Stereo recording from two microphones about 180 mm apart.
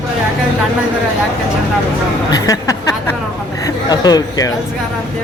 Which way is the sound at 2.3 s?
20° left (ahead or behind).